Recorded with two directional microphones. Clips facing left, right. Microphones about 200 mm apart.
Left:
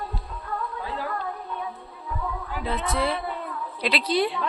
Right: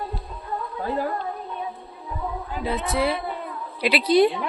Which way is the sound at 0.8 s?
45° right (ahead or behind).